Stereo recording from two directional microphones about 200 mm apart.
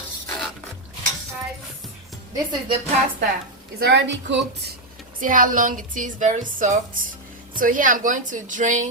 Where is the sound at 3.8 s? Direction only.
60° right (ahead or behind).